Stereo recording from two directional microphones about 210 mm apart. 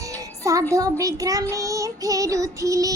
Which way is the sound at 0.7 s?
15° right (ahead or behind).